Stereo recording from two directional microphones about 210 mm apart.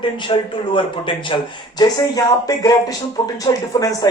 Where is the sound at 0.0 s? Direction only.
20° left (ahead or behind).